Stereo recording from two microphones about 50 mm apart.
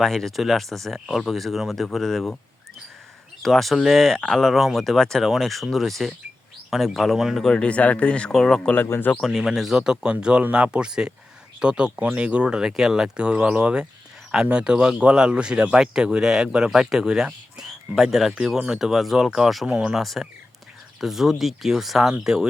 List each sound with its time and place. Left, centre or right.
0.0 s speech: centre
3.4 s speech: centre
7.5 s speech: left
8.3 s speech: centre
8.9 s speech: left
9.2 s speech: centre
13.1 s speech: right; by 19.6 s centre
19.6 s speech: centre
20.0 s speech: centre